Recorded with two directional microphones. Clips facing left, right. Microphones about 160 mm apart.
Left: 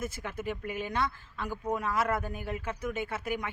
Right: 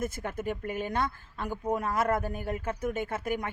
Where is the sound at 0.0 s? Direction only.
50° right (ahead or behind).